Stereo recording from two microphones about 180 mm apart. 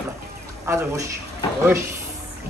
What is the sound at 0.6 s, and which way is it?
Speech, 15° right (ahead or behind).